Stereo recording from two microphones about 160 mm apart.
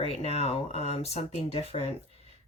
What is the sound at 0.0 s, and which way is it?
Speech, 40° left (ahead or behind).